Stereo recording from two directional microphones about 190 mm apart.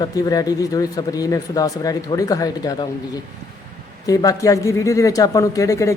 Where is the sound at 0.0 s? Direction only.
20° left (ahead or behind).